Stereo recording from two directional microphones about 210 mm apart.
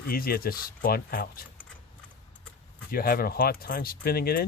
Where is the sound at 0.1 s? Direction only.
45° left (ahead or behind).